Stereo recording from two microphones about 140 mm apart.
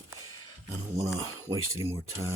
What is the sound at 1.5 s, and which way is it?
Speech, 30° right (ahead or behind).